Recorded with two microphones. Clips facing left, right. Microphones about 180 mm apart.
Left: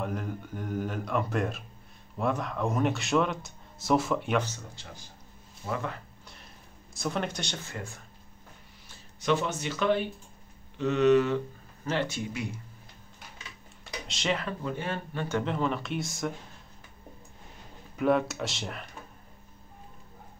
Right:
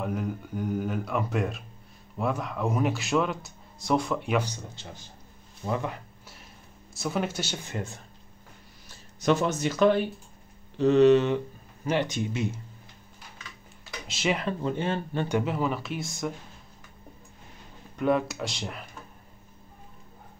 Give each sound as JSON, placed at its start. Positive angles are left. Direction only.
{"t": 0.0, "sound": "speech", "side_deg": 0}
{"t": 4.4, "sound": "speech", "side_deg": -15}
{"t": 6.9, "sound": "speech", "side_deg": -5}
{"t": 7.6, "sound": "speech", "side_deg": -20}
{"t": 9.2, "sound": "speech", "side_deg": -40}
{"t": 11.3, "sound": "speech", "side_deg": -15}
{"t": 14.0, "sound": "speech", "side_deg": -5}
{"t": 14.3, "sound": "speech", "side_deg": -25}
{"t": 15.2, "sound": "speech", "side_deg": -10}
{"t": 17.9, "sound": "speech", "side_deg": 0}